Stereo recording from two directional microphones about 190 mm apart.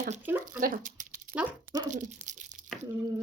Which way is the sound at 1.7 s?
20° right (ahead or behind).